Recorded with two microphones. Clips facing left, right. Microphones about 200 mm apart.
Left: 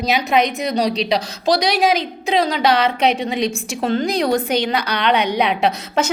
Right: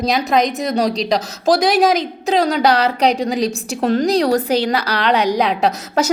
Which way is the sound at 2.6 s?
35° right (ahead or behind).